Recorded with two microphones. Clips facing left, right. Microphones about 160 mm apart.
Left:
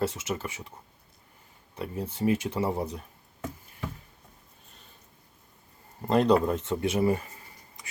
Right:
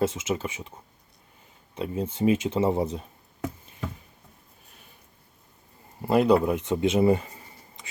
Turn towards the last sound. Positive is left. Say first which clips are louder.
# right 4 dB
turn(degrees=-25)  # may be behind; listen again after turning